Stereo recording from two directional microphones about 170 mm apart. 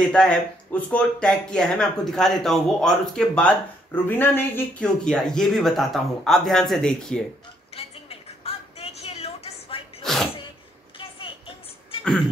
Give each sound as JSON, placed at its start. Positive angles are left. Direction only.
{"t": 0.1, "sound": "speech", "side_deg": 5}
{"t": 7.7, "sound": "a sound", "side_deg": 35}
{"t": 10.0, "sound": "sneeze", "side_deg": 0}
{"t": 11.0, "sound": "music", "side_deg": 30}